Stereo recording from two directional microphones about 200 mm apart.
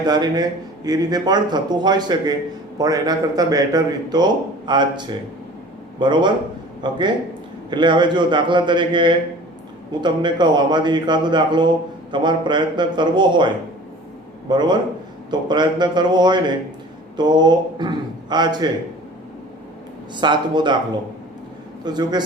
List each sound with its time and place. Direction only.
0.0 s a man's voice: 20° right (ahead or behind)
14.5 s a man's voice: 20° right (ahead or behind)
20.2 s a man's voice: 20° right (ahead or behind)
21.8 s a man's voice: 20° right (ahead or behind)